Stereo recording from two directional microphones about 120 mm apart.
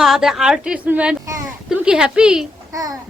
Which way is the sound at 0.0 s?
5° right (ahead or behind).